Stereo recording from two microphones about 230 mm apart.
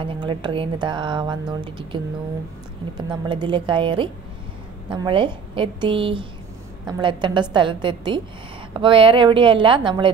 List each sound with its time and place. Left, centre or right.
0.0 s speech: right
3.1 s speech: centre